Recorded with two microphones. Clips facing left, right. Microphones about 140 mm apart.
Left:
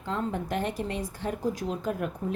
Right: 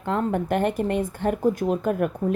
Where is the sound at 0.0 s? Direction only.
60° right (ahead or behind).